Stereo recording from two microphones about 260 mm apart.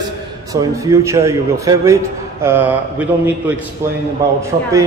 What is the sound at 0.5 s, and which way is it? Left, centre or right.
A man's voice, centre.